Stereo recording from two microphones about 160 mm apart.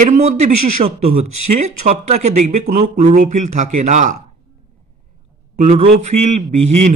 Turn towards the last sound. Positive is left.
turn(degrees=-45)  # may be behind; listen again after turning